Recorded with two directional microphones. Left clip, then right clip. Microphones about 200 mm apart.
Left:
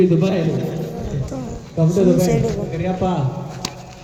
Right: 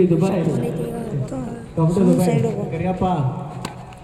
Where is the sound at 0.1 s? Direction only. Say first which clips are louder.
Left 1 dB; 30° right (ahead or behind).